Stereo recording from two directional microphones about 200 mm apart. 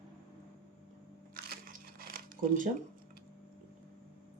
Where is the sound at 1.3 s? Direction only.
45° right (ahead or behind).